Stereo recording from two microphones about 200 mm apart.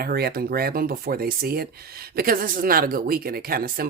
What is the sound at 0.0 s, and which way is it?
Speech, 50° right (ahead or behind).